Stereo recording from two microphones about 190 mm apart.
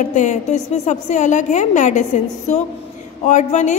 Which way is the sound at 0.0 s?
40° left (ahead or behind).